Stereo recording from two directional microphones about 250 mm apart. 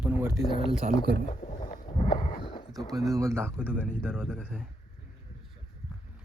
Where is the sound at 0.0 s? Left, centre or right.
Centre.